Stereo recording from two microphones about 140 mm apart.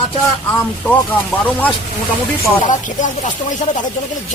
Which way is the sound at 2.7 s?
65° left (ahead or behind).